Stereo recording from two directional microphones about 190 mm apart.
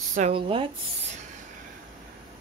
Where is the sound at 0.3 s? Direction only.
25° right (ahead or behind).